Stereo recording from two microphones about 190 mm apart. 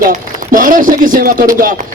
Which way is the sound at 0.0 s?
45° right (ahead or behind).